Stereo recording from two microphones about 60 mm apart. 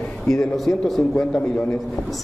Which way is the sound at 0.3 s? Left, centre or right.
Centre.